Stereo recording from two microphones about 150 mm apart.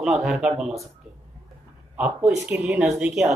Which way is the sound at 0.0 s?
Centre (ahead or behind).